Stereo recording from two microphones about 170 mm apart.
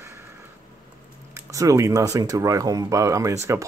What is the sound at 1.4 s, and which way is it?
Speech, 20° right (ahead or behind).